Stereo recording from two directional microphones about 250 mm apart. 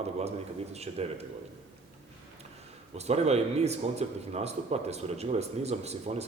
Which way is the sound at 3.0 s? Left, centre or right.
Right.